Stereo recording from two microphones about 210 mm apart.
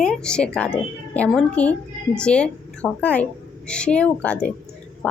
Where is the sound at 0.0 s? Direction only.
5° left (ahead or behind).